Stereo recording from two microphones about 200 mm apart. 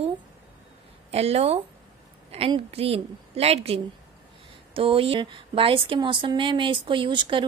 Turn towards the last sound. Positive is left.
turn(degrees=-25)  # may be behind; listen again after turning